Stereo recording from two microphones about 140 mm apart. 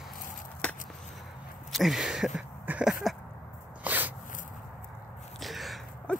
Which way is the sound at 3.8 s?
10° right (ahead or behind).